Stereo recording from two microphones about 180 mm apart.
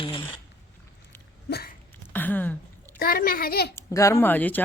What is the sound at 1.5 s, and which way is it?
Hiccup, 60° left (ahead or behind).